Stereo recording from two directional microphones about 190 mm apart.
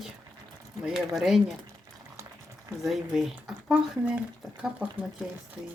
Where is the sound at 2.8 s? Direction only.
Centre (ahead or behind).